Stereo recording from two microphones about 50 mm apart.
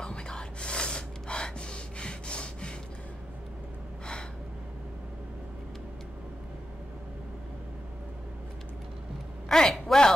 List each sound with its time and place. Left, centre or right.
0.0 s gasp: centre
9.5 s a man's voice: centre